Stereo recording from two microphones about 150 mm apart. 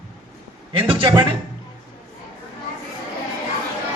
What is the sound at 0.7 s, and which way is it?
Speech, 35° right (ahead or behind).